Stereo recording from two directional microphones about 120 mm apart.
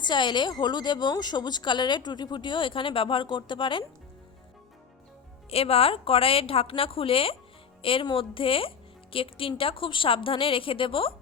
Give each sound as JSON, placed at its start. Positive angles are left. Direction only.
{"t": 0.0, "sound": "speech", "side_deg": 40}
{"t": 5.5, "sound": "a woman's voice", "side_deg": 55}